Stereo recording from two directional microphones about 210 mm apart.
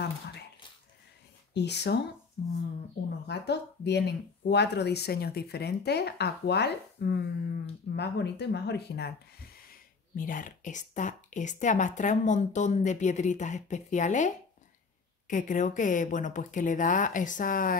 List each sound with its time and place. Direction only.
1.5 s speech: 55° left (ahead or behind)
3.3 s speech: 55° left (ahead or behind)
9.7 s speech: 40° left (ahead or behind)